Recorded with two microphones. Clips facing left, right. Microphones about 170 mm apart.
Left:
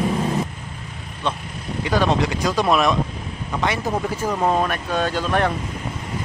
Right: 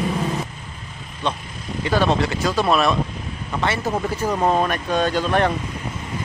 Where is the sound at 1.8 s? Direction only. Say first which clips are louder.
Even; 15° left (ahead or behind).